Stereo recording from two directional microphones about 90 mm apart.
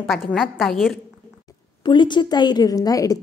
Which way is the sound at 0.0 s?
Centre (ahead or behind).